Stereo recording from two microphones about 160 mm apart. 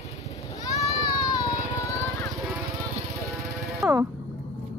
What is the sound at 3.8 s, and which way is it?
Music, 15° right (ahead or behind).